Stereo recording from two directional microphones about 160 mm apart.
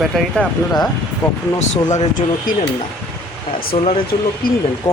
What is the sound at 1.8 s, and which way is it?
Speech, 55° left (ahead or behind).